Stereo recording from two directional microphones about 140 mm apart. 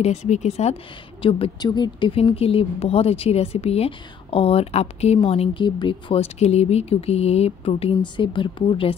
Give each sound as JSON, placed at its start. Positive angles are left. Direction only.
{"t": 0.0, "sound": "a woman's voice", "side_deg": 55}
{"t": 1.2, "sound": "a woman's voice", "side_deg": 35}